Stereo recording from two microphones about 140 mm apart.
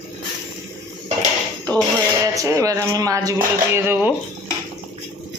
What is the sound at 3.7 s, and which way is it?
Speech, 15° right (ahead or behind).